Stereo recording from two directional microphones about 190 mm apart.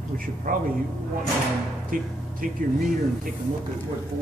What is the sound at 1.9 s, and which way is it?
Speech, 45° right (ahead or behind).